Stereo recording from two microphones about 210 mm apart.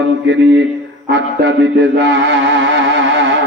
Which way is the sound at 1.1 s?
60° right (ahead or behind).